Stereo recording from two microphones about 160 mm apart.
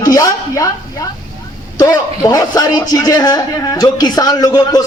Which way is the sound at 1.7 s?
20° left (ahead or behind).